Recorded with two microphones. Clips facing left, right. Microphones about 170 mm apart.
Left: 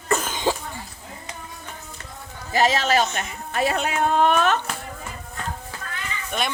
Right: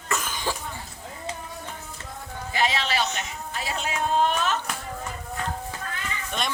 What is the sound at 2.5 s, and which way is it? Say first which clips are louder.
Speech: left 6 dB; 40° left (ahead or behind).